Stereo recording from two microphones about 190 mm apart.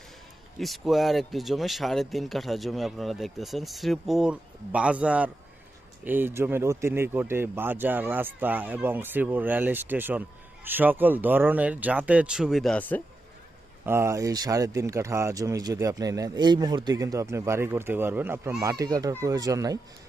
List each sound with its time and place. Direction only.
0.6 s speech: centre (ahead or behind)
13.8 s speech: 15° right (ahead or behind)